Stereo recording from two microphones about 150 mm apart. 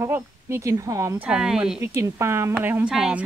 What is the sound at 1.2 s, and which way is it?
Speech, 5° right (ahead or behind).